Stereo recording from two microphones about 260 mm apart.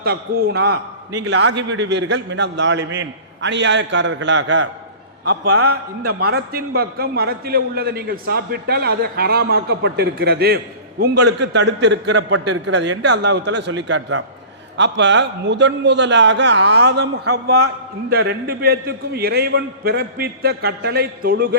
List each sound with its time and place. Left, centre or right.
0.0 s a man's voice: right
5.5 s a man's voice: right
6.0 s a man's voice: right